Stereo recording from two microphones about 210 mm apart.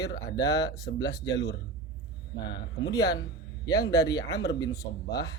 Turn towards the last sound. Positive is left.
turn(degrees=15)  # may be behind; listen again after turning